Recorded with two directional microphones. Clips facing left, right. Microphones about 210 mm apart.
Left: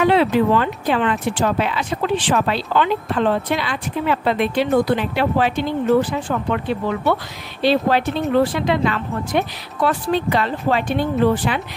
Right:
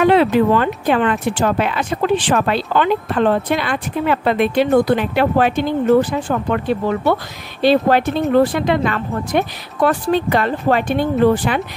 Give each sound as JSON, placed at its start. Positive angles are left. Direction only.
{"t": 0.0, "sound": "speech", "side_deg": -50}